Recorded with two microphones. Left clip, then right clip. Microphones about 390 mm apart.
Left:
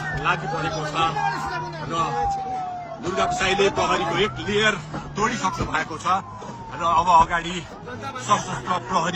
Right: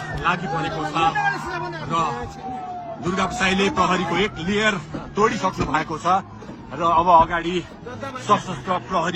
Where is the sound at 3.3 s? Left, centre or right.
Centre.